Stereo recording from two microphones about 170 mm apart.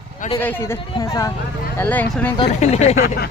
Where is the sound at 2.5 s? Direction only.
40° left (ahead or behind).